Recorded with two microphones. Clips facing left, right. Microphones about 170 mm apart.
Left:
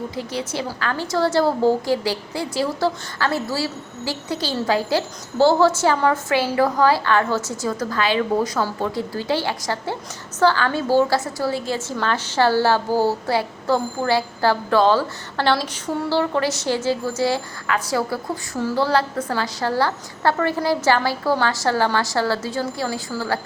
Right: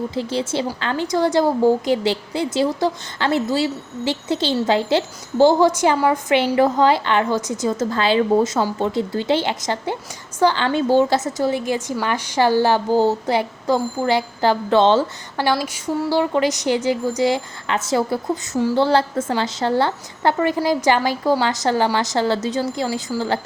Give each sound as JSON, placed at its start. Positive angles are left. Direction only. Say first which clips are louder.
{"t": 0.1, "sound": "a woman's voice", "louder": "right 4 dB", "side_deg": -30}
{"t": 15.5, "sound": "a sound", "louder": "right 2 dB", "side_deg": -5}
{"t": 16.0, "sound": "a woman's voice", "louder": "right 2 dB", "side_deg": -15}